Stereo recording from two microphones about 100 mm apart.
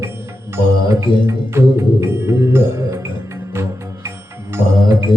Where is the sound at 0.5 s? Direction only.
30° right (ahead or behind).